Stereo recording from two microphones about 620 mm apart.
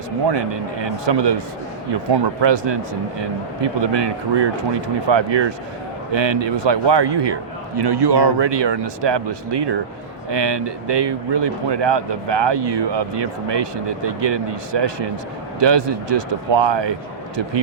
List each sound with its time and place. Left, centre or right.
0.3 s a man's voice: right
2.4 s a man's voice: right